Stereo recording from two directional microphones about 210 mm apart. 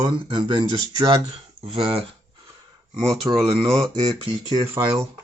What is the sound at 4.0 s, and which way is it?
Speech, 20° right (ahead or behind).